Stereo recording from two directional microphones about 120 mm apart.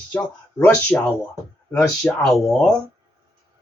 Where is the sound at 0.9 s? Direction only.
15° left (ahead or behind).